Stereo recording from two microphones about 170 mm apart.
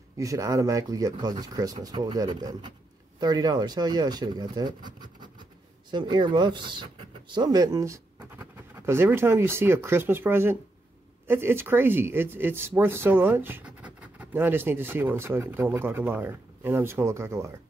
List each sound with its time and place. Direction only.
0.2 s speech: 20° right (ahead or behind)